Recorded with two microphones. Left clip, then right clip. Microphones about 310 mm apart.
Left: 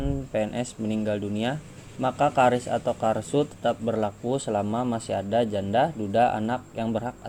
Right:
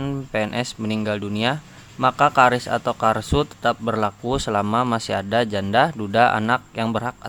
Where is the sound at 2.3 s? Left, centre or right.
Right.